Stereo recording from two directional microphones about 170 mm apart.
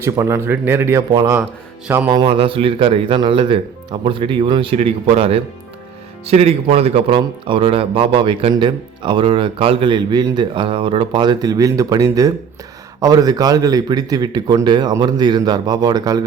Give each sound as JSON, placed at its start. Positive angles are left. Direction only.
{"t": 0.0, "sound": "speech", "side_deg": -15}
{"t": 2.0, "sound": "speech", "side_deg": -30}